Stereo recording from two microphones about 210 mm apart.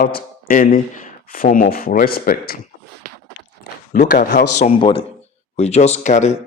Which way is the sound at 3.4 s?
60° left (ahead or behind).